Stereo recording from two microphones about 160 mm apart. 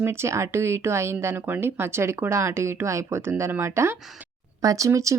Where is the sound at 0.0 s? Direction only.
15° right (ahead or behind).